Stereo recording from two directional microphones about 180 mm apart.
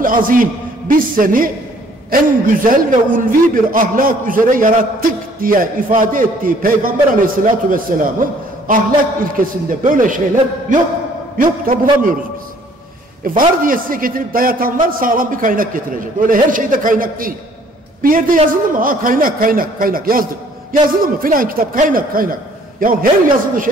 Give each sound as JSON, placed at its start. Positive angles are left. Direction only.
{"t": 0.0, "sound": "a man's voice", "side_deg": -50}
{"t": 13.2, "sound": "a man's voice", "side_deg": -50}